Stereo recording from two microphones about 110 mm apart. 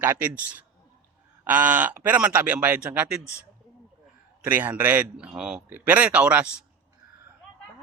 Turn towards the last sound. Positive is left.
turn(degrees=-15)  # may be behind; listen again after turning